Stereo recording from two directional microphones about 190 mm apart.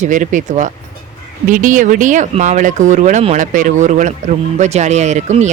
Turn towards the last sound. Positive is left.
turn(degrees=-35)  # may be behind; listen again after turning